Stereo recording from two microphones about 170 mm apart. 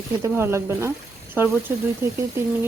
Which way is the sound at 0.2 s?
15° right (ahead or behind).